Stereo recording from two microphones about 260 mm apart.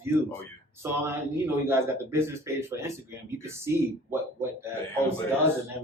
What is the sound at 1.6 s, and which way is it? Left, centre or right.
Speech, centre.